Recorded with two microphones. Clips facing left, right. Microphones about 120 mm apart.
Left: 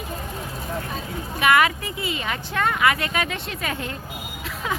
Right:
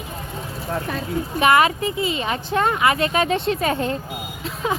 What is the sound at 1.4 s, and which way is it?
Speech, 30° right (ahead or behind).